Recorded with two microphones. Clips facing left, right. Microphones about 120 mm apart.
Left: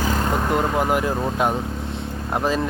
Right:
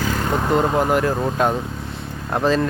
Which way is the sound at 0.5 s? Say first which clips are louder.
Right 5 dB; 25° right (ahead or behind).